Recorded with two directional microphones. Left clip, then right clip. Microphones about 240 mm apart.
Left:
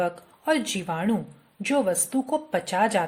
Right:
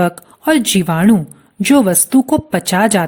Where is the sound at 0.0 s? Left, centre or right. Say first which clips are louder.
Right 11 dB; right.